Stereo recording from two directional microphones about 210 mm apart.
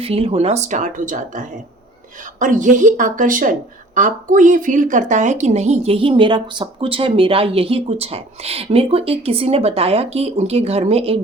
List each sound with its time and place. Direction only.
0.0 s speech: 25° right (ahead or behind)